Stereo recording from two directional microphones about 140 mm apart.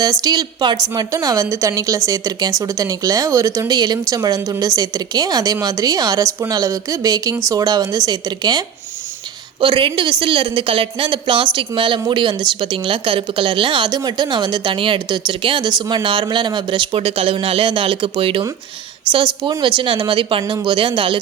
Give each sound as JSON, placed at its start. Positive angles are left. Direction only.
{"t": 0.0, "sound": "a woman's voice", "side_deg": -25}